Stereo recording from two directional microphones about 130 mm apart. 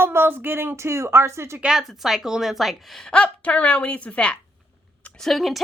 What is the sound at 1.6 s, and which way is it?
A woman's voice, centre (ahead or behind).